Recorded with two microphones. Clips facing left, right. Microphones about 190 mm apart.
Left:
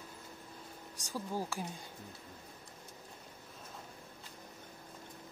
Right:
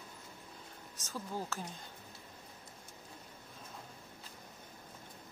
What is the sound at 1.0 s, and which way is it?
Speech, 15° left (ahead or behind).